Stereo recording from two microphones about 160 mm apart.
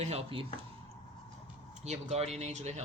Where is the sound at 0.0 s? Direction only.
40° right (ahead or behind).